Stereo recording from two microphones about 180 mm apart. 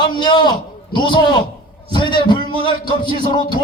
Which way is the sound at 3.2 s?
25° left (ahead or behind).